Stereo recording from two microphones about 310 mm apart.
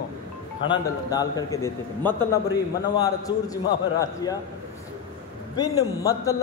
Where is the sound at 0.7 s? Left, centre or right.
Centre.